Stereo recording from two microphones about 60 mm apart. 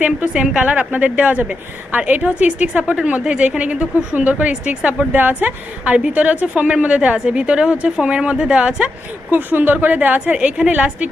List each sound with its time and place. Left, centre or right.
0.0 s a woman's voice: right
0.4 s a woman's voice: centre
0.7 s a woman's voice: right
9.3 s a woman's voice: right